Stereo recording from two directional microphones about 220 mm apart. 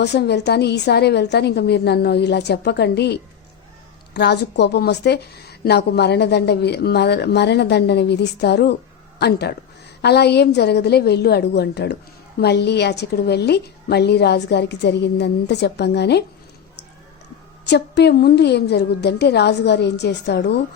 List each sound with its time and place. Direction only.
0.0 s a woman's voice: 50° left (ahead or behind)
17.7 s a woman's voice: 50° left (ahead or behind)